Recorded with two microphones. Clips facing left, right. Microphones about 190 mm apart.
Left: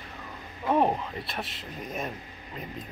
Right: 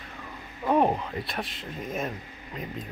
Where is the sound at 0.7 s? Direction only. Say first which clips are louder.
Right 1 dB; centre (ahead or behind).